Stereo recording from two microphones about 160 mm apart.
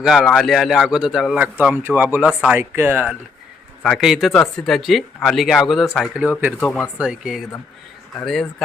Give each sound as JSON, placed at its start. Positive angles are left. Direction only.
{"t": 0.0, "sound": "speech", "side_deg": 0}
{"t": 1.5, "sound": "speech", "side_deg": -10}
{"t": 6.6, "sound": "speech", "side_deg": 10}
{"t": 7.0, "sound": "speech", "side_deg": -5}